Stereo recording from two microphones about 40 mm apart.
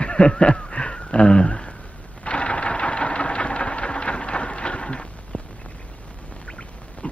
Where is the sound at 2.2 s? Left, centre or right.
Left.